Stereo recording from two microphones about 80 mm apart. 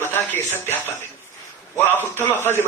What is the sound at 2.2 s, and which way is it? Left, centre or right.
Speech, left.